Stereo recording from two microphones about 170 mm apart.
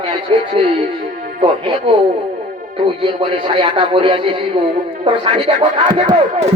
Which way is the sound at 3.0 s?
30° right (ahead or behind).